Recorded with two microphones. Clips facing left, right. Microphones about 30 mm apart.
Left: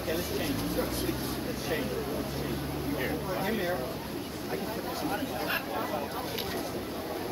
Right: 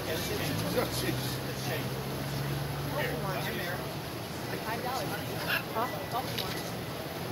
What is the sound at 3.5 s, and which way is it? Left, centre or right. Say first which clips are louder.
Speech: left 5 dB; centre.